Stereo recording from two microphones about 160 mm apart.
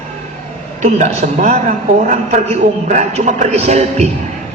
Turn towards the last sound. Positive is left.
turn(degrees=-45)  # may be behind; listen again after turning